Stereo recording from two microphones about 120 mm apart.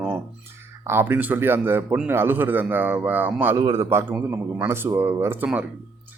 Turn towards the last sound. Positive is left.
turn(degrees=-20)  # may be behind; listen again after turning